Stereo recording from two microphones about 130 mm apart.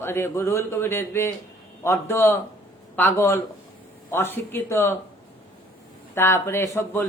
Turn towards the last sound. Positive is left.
turn(degrees=20)  # may be behind; listen again after turning